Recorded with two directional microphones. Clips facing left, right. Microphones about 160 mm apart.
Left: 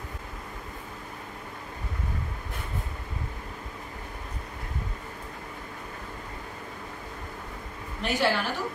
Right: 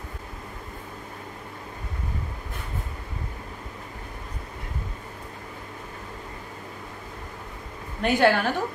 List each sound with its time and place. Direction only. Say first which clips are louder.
8.0 s a woman's voice: right 6 dB; 55° right (ahead or behind)